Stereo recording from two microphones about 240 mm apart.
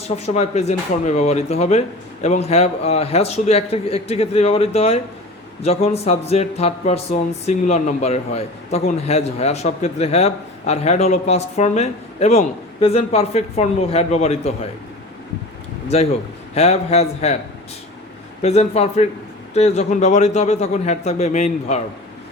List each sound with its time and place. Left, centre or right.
0.2 s speech: left
16.6 s speech: left
18.4 s speech: left